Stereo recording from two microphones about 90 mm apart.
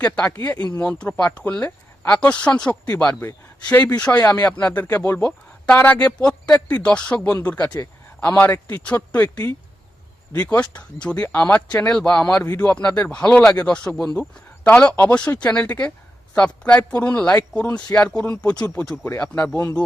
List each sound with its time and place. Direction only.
0.0 s speech: 15° left (ahead or behind)
19.2 s speech: 15° left (ahead or behind)